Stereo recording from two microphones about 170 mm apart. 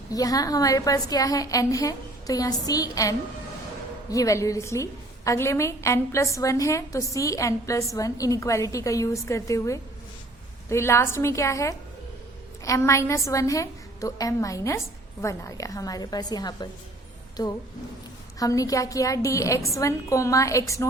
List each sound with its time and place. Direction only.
0.1 s a woman's voice: 20° left (ahead or behind)